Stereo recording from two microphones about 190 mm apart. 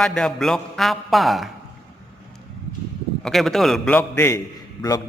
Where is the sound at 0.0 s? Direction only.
5° left (ahead or behind).